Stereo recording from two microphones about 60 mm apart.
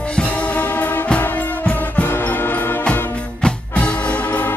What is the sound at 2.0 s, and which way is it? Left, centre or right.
Music, left.